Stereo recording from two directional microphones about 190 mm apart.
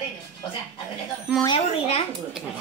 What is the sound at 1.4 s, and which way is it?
Speech, 30° left (ahead or behind).